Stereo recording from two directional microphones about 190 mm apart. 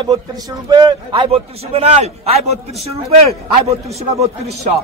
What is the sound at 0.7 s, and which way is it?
Speech, 25° right (ahead or behind).